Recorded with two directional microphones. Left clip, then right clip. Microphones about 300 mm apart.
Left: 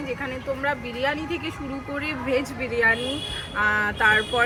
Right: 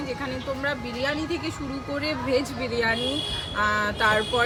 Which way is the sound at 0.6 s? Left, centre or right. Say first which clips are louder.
Left 3 dB; centre.